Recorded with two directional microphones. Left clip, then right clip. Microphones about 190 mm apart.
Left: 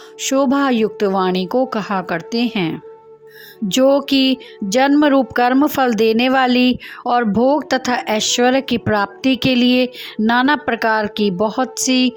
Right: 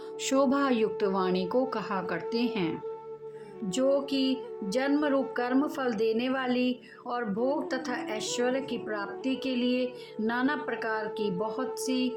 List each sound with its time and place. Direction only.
0.2 s a woman's voice: 35° left (ahead or behind)